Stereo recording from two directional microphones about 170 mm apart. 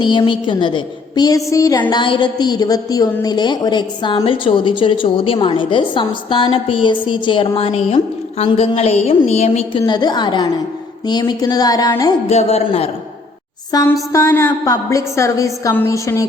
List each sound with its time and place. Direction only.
0.0 s a woman's voice: 30° left (ahead or behind)
9.8 s a woman's voice: 25° left (ahead or behind)
12.3 s a woman's voice: 40° left (ahead or behind)
13.7 s a woman's voice: 25° left (ahead or behind)